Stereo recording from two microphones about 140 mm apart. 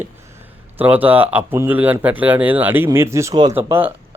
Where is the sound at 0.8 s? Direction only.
10° right (ahead or behind).